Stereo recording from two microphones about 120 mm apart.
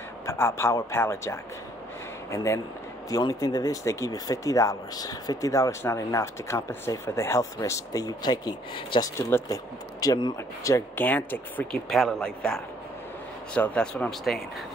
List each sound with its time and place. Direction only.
0.3 s speech: 20° left (ahead or behind); by 9.1 s 40° left (ahead or behind)
9.1 s speech: 25° left (ahead or behind)
10.7 s speech: 15° left (ahead or behind)
11.9 s a man's voice: centre (ahead or behind)